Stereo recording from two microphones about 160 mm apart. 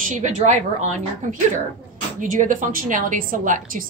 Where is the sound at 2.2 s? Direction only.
55° right (ahead or behind).